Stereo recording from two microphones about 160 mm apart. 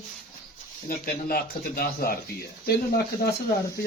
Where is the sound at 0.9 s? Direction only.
70° left (ahead or behind).